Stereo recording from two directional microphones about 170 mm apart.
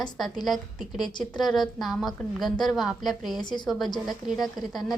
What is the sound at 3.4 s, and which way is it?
Speech, 25° left (ahead or behind).